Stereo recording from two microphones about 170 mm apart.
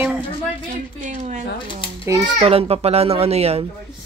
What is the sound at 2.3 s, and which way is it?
A child's voice, 35° right (ahead or behind).